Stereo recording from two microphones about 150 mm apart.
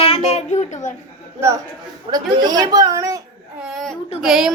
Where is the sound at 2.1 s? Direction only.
25° right (ahead or behind).